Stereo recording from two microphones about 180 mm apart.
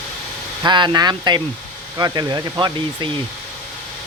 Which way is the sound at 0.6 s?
25° right (ahead or behind).